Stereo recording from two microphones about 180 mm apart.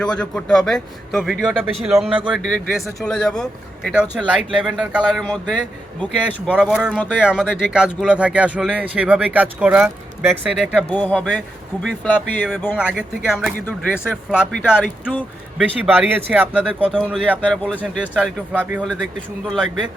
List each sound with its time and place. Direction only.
0.0 s a man's voice: 5° left (ahead or behind)
10.8 s speech: 10° left (ahead or behind)
12.7 s speech: 5° right (ahead or behind)
13.7 s speech: 10° left (ahead or behind)
15.5 s speech: 10° right (ahead or behind)
16.8 s a man's voice: 5° left (ahead or behind)